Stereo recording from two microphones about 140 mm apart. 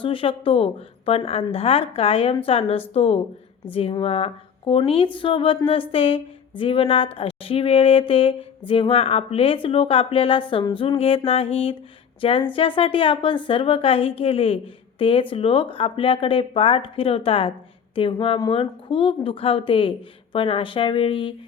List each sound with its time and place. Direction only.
0.0 s a woman's voice: 40° left (ahead or behind)